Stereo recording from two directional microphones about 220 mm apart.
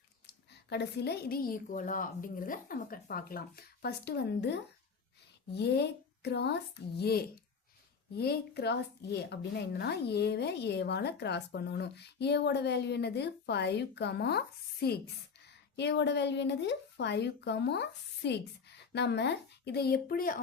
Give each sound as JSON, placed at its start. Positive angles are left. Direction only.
{"t": 0.7, "sound": "a woman's voice", "side_deg": 50}